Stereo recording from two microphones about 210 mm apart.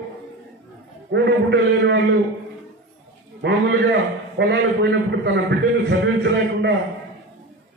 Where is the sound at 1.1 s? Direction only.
60° right (ahead or behind).